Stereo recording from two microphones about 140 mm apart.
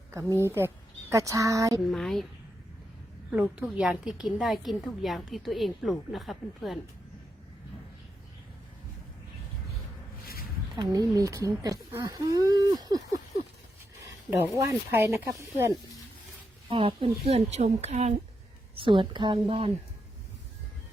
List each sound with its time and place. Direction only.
0.4 s a woman's voice: 15° right (ahead or behind)
1.9 s a woman's voice: centre (ahead or behind)
3.3 s a woman's voice: 10° right (ahead or behind)
10.8 s speech: 25° right (ahead or behind)
14.3 s speech: 20° right (ahead or behind)
16.6 s a woman's voice: 40° right (ahead or behind)
17.2 s speech: 50° right (ahead or behind)
18.8 s a woman's voice: 35° right (ahead or behind)